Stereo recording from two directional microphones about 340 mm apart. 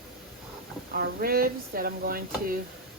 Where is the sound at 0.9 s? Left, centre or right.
Right.